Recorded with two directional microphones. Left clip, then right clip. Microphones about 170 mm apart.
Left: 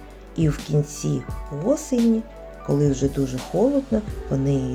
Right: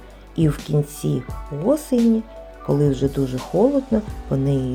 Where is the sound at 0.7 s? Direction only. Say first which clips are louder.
Right 2 dB; 30° right (ahead or behind).